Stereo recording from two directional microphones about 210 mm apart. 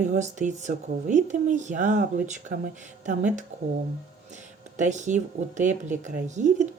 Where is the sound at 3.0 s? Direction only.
35° right (ahead or behind).